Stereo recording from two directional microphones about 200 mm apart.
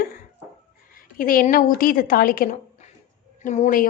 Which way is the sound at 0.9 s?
45° left (ahead or behind).